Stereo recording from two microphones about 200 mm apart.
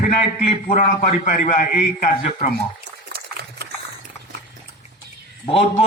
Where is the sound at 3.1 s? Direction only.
50° right (ahead or behind).